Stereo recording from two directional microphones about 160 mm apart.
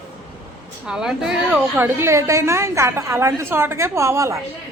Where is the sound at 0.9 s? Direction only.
5° right (ahead or behind).